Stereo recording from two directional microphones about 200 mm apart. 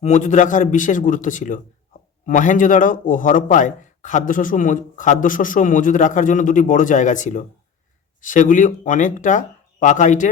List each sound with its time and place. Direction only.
0.0 s a man's voice: 35° left (ahead or behind)